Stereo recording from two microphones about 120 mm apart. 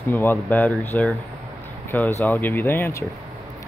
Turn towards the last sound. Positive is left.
turn(degrees=25)  # may be behind; listen again after turning